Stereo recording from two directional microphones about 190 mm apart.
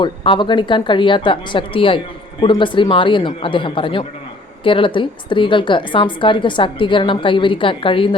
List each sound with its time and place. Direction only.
0.0 s a woman's voice: 25° left (ahead or behind)